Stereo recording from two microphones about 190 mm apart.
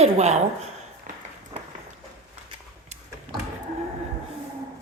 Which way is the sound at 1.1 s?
45° right (ahead or behind).